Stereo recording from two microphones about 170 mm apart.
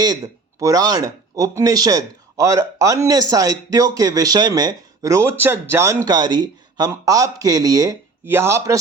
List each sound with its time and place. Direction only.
0.6 s speech: 20° right (ahead or behind)